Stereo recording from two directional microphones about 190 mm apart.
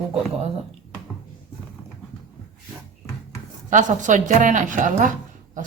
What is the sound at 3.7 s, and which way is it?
A woman's voice, 40° right (ahead or behind).